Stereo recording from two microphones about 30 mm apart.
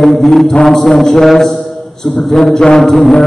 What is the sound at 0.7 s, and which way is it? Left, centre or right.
Speech, centre.